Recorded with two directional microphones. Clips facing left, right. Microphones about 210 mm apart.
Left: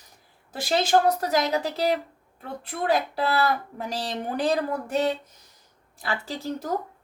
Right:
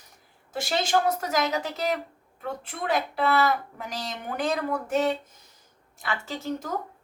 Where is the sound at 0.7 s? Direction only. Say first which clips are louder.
Left 4 dB; 35° left (ahead or behind).